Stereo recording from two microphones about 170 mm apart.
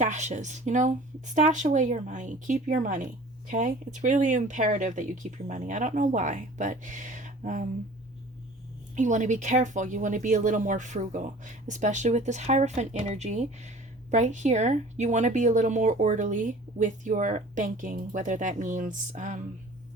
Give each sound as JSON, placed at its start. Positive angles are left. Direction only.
{"t": 0.0, "sound": "speech", "side_deg": -45}
{"t": 9.0, "sound": "speech", "side_deg": -45}